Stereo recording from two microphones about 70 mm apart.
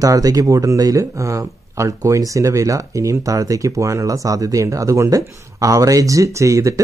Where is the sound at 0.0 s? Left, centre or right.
Right.